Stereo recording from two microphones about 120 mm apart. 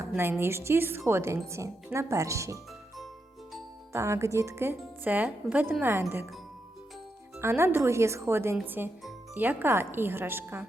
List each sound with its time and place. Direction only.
0.2 s speech: 20° right (ahead or behind)
3.9 s speech: 25° right (ahead or behind)
7.3 s speech: 20° right (ahead or behind)